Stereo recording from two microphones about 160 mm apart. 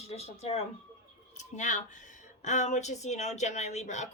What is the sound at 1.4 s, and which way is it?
Speech, 50° left (ahead or behind).